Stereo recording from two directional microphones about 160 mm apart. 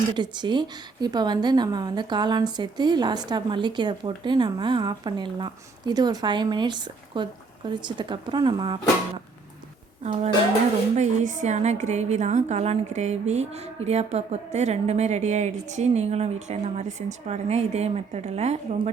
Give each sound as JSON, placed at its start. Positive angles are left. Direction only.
{"t": 0.1, "sound": "speech", "side_deg": -30}
{"t": 10.0, "sound": "a woman's voice", "side_deg": -45}